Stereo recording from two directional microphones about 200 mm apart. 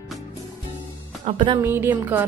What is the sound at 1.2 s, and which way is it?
Speech, 35° right (ahead or behind).